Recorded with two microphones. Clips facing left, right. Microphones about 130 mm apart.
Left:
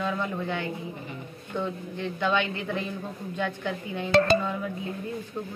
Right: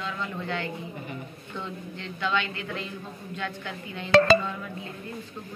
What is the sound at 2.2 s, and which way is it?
Speech, 15° left (ahead or behind).